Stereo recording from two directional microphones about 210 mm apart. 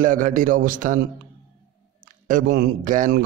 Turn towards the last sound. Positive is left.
turn(degrees=-40)  # may be behind; listen again after turning